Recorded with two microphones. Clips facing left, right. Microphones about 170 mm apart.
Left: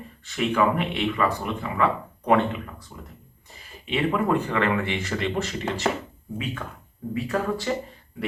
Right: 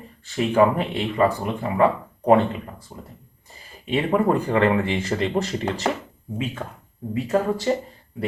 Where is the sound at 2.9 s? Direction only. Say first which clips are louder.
Right 4 dB; 25° right (ahead or behind).